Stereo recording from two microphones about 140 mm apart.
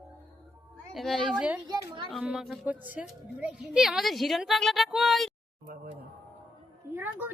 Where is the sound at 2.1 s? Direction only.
5° right (ahead or behind).